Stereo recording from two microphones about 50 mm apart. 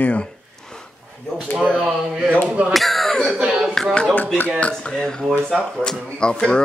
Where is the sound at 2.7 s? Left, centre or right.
Centre.